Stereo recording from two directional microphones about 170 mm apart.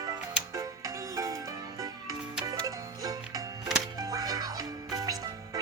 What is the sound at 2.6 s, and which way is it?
Music, 20° right (ahead or behind).